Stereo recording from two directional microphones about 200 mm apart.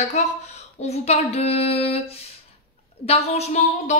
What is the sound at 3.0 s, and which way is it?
Speech, 30° left (ahead or behind).